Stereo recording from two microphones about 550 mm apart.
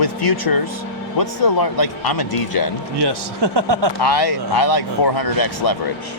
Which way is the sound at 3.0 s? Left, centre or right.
Right.